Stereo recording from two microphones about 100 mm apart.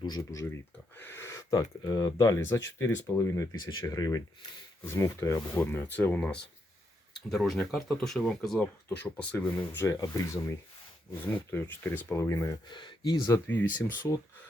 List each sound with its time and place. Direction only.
0.2 s speech: 35° left (ahead or behind)
0.9 s speech: 25° left (ahead or behind); by 4.2 s 40° left (ahead or behind)
4.9 s speech: 30° left (ahead or behind)
9.8 s speech: 30° left (ahead or behind)
11.8 s speech: 20° left (ahead or behind)
12.6 s speech: 50° left (ahead or behind)
13.6 s speech: 20° left (ahead or behind)